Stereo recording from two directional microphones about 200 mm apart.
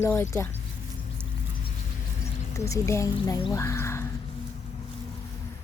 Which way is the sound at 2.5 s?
15° left (ahead or behind).